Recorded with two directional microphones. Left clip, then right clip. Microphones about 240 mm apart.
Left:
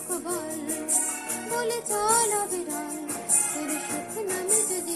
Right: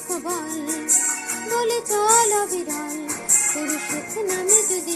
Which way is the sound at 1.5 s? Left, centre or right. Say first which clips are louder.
Right 7 dB; centre.